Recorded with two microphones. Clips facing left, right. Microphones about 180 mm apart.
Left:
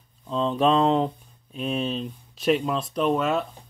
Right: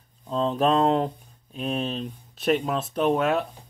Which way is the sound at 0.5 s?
Centre (ahead or behind).